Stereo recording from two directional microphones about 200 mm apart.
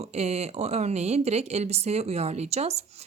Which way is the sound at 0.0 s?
30° right (ahead or behind).